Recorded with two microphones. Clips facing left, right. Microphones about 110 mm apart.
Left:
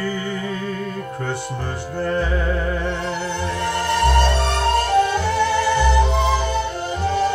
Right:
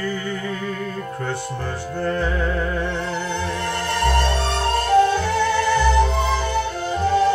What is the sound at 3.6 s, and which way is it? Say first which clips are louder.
Music: left 4 dB; 20° left (ahead or behind).